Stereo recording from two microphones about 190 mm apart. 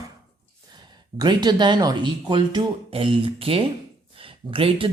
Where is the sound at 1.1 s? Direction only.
20° right (ahead or behind).